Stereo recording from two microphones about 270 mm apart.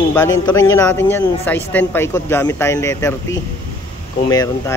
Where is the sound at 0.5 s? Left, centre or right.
Centre.